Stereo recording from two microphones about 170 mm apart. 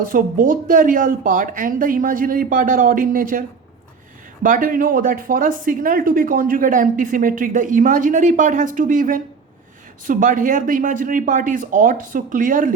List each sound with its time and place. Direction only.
0.0 s speech: 55° right (ahead or behind)
4.4 s speech: 55° right (ahead or behind)